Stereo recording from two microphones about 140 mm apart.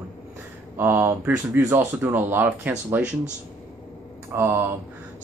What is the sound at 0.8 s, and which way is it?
Speech, 15° right (ahead or behind).